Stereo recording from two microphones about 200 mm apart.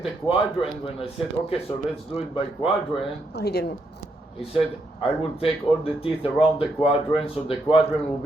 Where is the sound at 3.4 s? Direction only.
55° left (ahead or behind).